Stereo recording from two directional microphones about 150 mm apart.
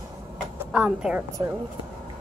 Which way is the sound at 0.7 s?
5° right (ahead or behind).